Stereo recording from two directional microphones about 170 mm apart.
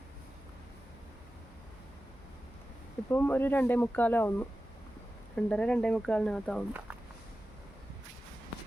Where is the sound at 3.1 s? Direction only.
10° left (ahead or behind).